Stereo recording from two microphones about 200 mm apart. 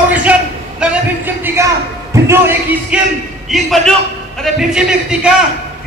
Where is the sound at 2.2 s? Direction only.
10° right (ahead or behind).